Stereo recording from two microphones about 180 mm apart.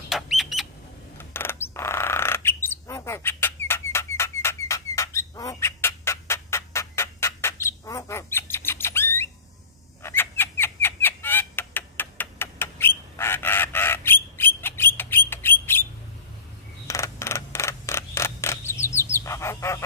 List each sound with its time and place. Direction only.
0.1 s bird: centre (ahead or behind)
1.1 s bird: 10° left (ahead or behind)
4.9 s fowl: 15° left (ahead or behind)
10.0 s bird: 10° left (ahead or behind)
16.8 s mechanisms: 15° left (ahead or behind)
19.1 s goose: 15° left (ahead or behind)